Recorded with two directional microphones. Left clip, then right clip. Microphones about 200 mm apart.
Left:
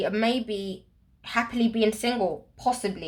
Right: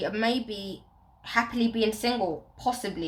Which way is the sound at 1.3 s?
30° left (ahead or behind).